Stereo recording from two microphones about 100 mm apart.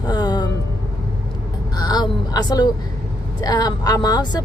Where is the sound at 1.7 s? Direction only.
45° left (ahead or behind).